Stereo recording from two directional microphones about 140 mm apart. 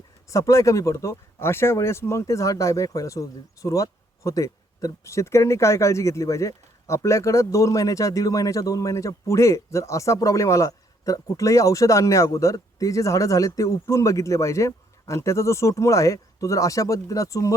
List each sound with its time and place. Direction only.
0.3 s speech: 20° left (ahead or behind)